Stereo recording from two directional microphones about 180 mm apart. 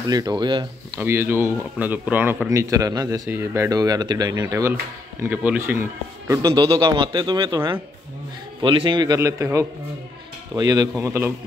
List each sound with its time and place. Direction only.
0.1 s speech: 20° right (ahead or behind)
1.0 s a man's voice: 15° right (ahead or behind)